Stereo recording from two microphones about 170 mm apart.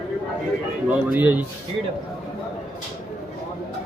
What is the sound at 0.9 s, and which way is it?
Speech, 10° right (ahead or behind).